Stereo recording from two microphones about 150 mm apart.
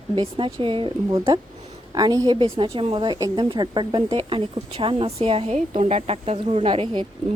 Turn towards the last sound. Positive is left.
turn(degrees=-35)  # may be behind; listen again after turning